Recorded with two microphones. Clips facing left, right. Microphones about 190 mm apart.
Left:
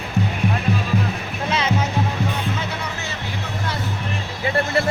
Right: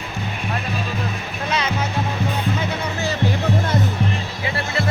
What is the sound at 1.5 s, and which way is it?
Music, 25° left (ahead or behind).